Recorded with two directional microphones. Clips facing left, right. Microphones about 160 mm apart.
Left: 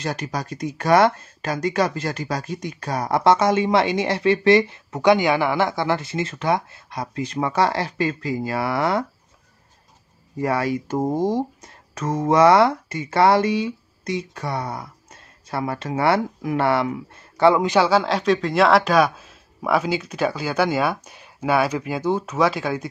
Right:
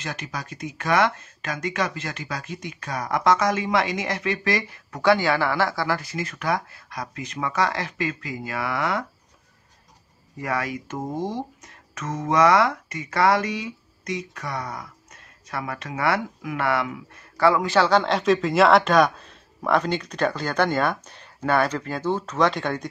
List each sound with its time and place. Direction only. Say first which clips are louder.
0.0 s speech: left 6 dB; 35° left (ahead or behind)
10.3 s speech: left 6 dB; 30° left (ahead or behind)
17.7 s speech: left 1 dB; 5° left (ahead or behind)